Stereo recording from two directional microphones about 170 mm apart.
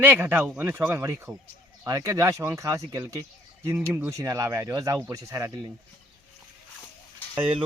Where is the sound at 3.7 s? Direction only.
10° right (ahead or behind).